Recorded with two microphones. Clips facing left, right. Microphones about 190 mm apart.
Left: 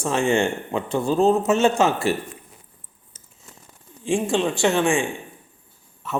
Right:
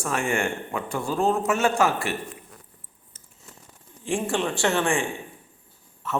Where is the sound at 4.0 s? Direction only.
15° left (ahead or behind).